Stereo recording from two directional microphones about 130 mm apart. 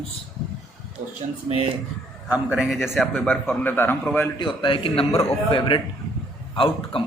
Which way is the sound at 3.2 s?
10° left (ahead or behind).